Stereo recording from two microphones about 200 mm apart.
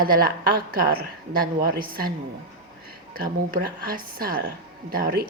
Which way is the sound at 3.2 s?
45° right (ahead or behind).